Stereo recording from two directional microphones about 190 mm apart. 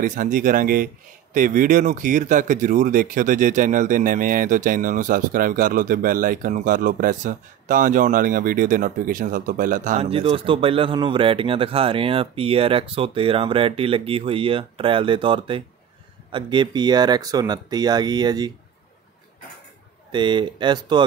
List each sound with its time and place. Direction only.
0.0 s speech: 45° right (ahead or behind); by 18.5 s 20° right (ahead or behind)
20.1 s speech: 25° right (ahead or behind)